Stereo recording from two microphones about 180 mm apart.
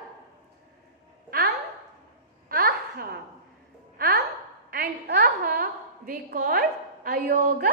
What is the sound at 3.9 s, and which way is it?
A woman's voice, 55° right (ahead or behind).